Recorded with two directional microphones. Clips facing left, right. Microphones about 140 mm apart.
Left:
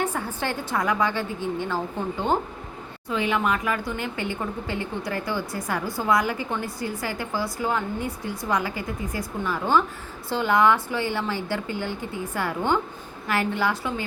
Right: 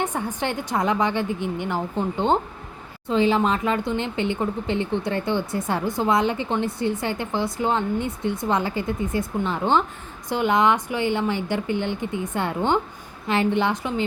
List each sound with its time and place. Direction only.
0.0 s speech: 20° right (ahead or behind)